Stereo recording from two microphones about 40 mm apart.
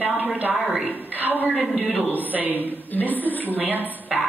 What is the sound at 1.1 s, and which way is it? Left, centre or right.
Speech, right.